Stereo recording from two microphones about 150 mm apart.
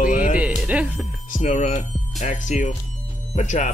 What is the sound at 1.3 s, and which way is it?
Speech, 55° left (ahead or behind).